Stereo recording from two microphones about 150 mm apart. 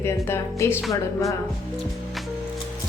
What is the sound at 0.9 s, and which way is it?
Music, 20° left (ahead or behind).